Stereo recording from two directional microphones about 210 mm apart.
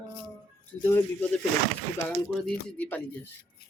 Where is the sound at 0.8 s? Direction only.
10° left (ahead or behind).